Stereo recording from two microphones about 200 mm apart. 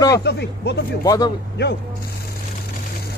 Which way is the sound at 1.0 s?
20° left (ahead or behind).